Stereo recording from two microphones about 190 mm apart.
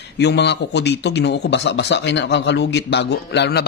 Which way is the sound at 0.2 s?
65° left (ahead or behind).